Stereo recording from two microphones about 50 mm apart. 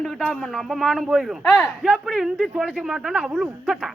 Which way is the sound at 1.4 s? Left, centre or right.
Left.